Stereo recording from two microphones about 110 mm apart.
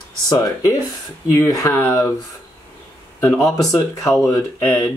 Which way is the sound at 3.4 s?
30° left (ahead or behind).